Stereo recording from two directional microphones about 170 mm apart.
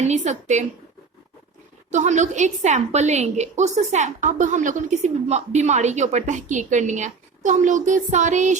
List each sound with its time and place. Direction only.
0.0 s a woman's voice: 45° right (ahead or behind)
1.9 s a woman's voice: 45° right (ahead or behind)